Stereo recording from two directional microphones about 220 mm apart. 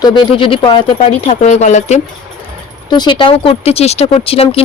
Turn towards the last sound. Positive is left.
turn(degrees=25)  # may be behind; listen again after turning